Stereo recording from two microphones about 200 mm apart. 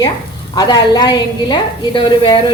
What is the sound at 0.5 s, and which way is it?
A woman's voice, 20° left (ahead or behind).